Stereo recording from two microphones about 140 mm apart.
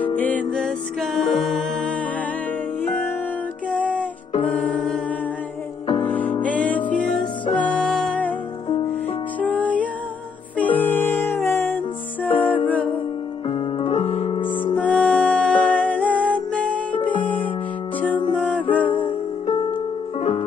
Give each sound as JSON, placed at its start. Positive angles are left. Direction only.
{"t": 0.2, "sound": "music", "side_deg": 10}
{"t": 3.7, "sound": "music", "side_deg": 10}
{"t": 6.0, "sound": "music", "side_deg": 10}
{"t": 9.4, "sound": "music", "side_deg": 10}
{"t": 13.5, "sound": "music", "side_deg": 40}
{"t": 14.4, "sound": "music", "side_deg": 35}
{"t": 14.8, "sound": "music", "side_deg": 10}
{"t": 18.3, "sound": "music", "side_deg": 10}